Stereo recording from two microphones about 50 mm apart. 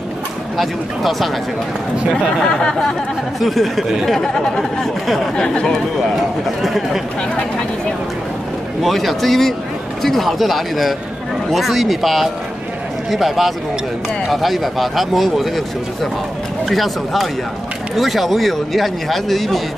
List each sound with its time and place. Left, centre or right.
0.6 s speech: centre
5.3 s speech: centre
6.6 s speech: centre
8.8 s speech: centre